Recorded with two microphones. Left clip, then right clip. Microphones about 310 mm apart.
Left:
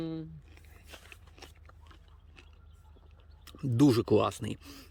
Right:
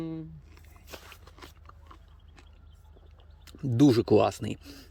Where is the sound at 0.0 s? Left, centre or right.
Centre.